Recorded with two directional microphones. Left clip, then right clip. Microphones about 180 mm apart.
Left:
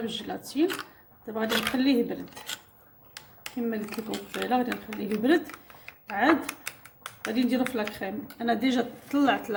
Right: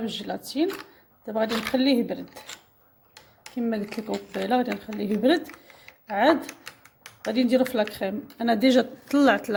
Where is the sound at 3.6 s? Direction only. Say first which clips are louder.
Right 3 dB; 50° right (ahead or behind).